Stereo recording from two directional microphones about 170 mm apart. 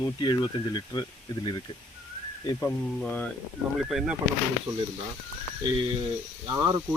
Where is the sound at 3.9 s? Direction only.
5° right (ahead or behind).